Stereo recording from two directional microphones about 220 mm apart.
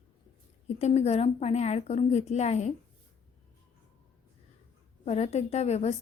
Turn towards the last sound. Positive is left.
turn(degrees=30)  # may be behind; listen again after turning